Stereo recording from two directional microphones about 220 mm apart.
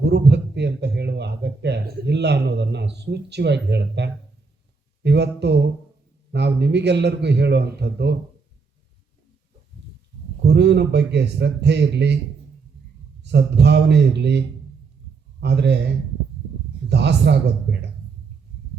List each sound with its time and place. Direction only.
0.0 s a sound: 50° right (ahead or behind)
5.0 s a man's voice: 50° right (ahead or behind)
10.4 s a man's voice: 50° right (ahead or behind)
13.2 s a man's voice: 50° right (ahead or behind)
16.9 s a man's voice: 50° right (ahead or behind)